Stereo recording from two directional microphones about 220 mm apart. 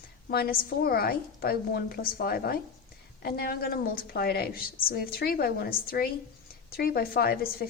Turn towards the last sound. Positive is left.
turn(degrees=45)  # may be behind; listen again after turning